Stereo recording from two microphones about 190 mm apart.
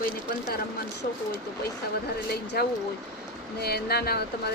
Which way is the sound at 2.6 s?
55° left (ahead or behind).